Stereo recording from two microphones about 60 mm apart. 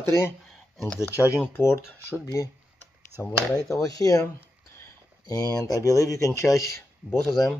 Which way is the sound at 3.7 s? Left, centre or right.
Left.